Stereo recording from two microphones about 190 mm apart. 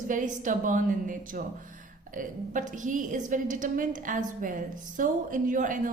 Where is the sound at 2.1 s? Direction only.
45° right (ahead or behind).